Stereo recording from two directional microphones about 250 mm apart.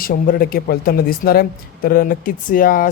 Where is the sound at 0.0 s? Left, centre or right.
Left.